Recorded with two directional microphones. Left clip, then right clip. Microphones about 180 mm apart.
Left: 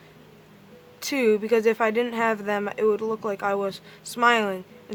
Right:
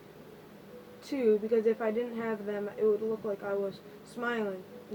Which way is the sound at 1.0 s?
30° left (ahead or behind).